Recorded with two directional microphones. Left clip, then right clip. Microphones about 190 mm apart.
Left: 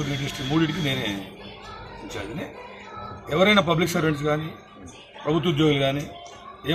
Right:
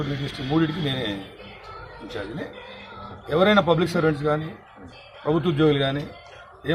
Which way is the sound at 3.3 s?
10° right (ahead or behind).